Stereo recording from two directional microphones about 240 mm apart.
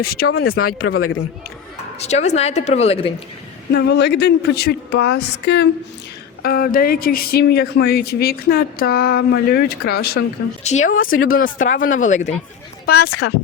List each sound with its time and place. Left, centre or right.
0.9 s a man's voice: left
2.0 s a woman's voice: left
3.7 s speech: left
10.6 s speech: left
12.8 s speech: left